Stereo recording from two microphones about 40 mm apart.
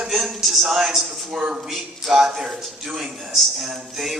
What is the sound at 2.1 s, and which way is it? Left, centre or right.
Speech, centre.